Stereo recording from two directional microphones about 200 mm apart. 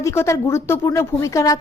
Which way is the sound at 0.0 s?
15° left (ahead or behind).